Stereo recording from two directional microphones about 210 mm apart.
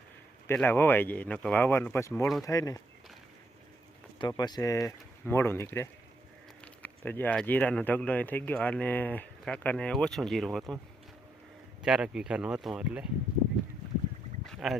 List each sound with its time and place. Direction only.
0.4 s speech: 10° left (ahead or behind)
4.2 s speech: 20° left (ahead or behind); by 10.8 s centre (ahead or behind)
11.8 s speech: 5° right (ahead or behind)
14.4 s boat: centre (ahead or behind)